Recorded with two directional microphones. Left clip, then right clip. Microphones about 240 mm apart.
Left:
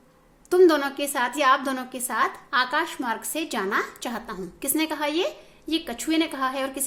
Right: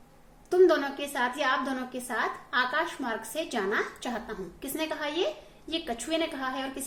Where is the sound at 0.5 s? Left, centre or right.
Left.